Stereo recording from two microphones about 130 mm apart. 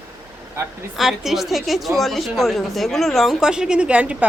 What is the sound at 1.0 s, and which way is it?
A woman's voice, centre (ahead or behind).